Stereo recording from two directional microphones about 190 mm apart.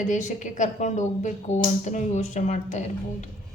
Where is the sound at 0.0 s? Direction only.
40° left (ahead or behind).